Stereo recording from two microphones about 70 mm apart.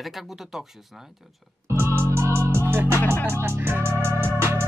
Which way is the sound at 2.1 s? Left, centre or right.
Right.